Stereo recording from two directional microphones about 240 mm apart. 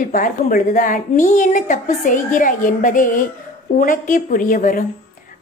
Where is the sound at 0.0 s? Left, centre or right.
Left.